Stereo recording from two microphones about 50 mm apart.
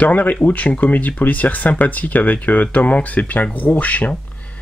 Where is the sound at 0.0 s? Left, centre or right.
Left.